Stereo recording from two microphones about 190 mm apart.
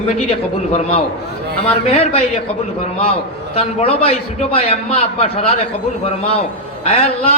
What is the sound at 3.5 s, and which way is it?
A man's voice, 30° left (ahead or behind).